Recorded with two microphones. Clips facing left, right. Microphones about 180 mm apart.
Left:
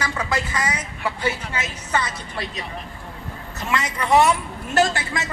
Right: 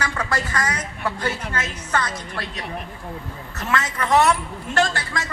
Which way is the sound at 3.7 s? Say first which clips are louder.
Left 1 dB; 15° left (ahead or behind).